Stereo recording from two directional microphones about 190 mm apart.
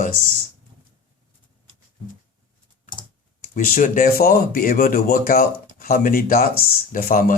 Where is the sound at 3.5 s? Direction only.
45° left (ahead or behind).